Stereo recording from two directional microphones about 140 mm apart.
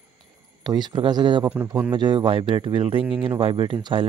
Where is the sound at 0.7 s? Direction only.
35° right (ahead or behind).